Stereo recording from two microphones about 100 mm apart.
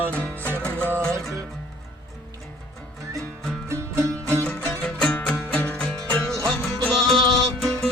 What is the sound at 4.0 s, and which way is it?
Music, 30° right (ahead or behind).